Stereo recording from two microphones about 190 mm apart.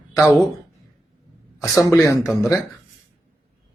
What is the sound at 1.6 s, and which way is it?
Speech, 15° left (ahead or behind).